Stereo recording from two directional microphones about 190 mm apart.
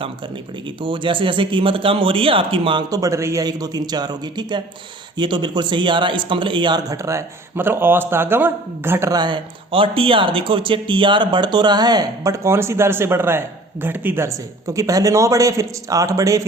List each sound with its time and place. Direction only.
0.8 s speech: 25° right (ahead or behind)